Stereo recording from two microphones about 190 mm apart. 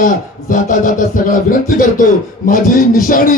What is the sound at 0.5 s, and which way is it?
Speech, 45° left (ahead or behind).